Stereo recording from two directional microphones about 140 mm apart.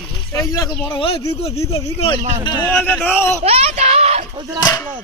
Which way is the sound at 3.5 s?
50° right (ahead or behind).